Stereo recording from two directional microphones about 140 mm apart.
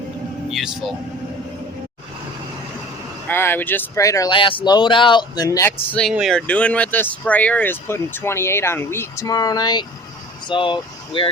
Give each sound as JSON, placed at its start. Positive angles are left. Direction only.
{"t": 3.2, "sound": "speech", "side_deg": 15}
{"t": 4.3, "sound": "speech", "side_deg": 40}
{"t": 5.9, "sound": "speech", "side_deg": 5}